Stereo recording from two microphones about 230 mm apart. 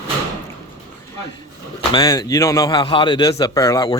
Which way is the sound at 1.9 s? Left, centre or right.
Centre.